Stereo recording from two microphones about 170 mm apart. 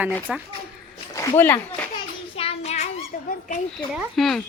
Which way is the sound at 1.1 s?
20° left (ahead or behind).